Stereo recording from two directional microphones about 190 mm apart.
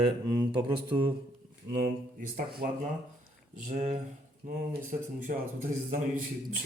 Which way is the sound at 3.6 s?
40° right (ahead or behind).